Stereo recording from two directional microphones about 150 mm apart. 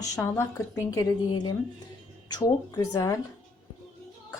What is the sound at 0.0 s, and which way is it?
Speech, 20° left (ahead or behind).